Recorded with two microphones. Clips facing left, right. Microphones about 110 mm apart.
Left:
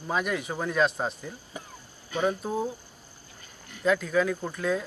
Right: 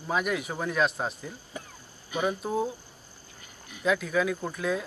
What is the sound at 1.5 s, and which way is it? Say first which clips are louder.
Speech: right 3 dB; 15° left (ahead or behind).